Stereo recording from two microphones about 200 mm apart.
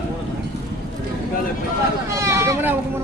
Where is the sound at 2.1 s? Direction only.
15° right (ahead or behind).